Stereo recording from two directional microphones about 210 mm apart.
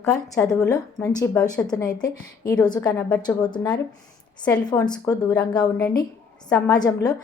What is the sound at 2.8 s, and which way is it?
Speech, 5° left (ahead or behind).